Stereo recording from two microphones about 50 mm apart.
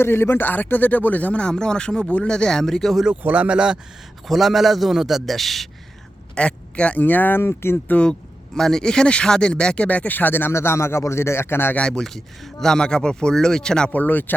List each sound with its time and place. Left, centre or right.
0.0 s speech: left; by 3.0 s centre
3.2 s speech: right
4.3 s a man's voice: centre
6.3 s a man's voice: left
7.0 s speech: left
8.5 s speech: centre; by 10.5 s left
10.5 s speech: left
11.8 s speech: centre
13.9 s speech: left